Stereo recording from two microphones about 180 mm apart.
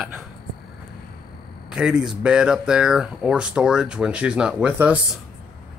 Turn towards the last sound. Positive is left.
turn(degrees=-5)  # may be behind; listen again after turning